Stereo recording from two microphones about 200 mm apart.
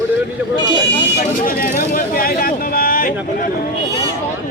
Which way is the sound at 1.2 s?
45° left (ahead or behind).